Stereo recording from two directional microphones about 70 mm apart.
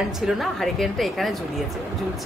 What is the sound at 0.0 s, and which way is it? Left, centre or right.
A woman's voice, centre.